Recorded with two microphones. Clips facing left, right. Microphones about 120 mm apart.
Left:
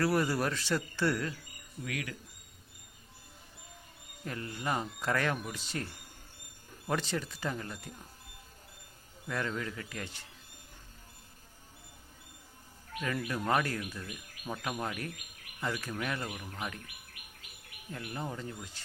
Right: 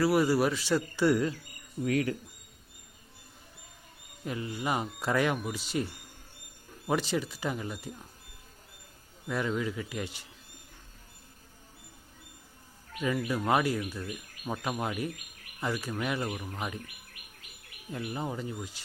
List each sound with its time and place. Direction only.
0.0 s speech: 5° right (ahead or behind)
1.8 s speech: 35° right (ahead or behind)
4.3 s speech: 15° right (ahead or behind)
9.2 s speech: 10° right (ahead or behind)
13.0 s speech: 10° right (ahead or behind)
17.9 s speech: 15° right (ahead or behind)